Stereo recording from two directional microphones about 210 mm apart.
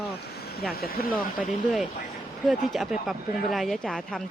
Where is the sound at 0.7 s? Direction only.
45° left (ahead or behind).